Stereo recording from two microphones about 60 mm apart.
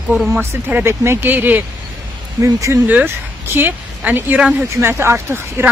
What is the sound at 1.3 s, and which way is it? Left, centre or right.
Speech, right.